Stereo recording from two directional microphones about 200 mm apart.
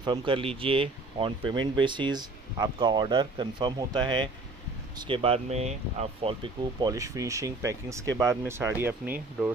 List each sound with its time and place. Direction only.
0.0 s speech: 25° right (ahead or behind)